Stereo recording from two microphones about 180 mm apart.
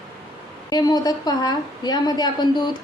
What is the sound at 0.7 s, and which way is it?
A woman's voice, 20° left (ahead or behind).